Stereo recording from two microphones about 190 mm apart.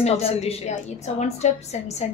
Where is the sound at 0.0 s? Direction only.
30° left (ahead or behind).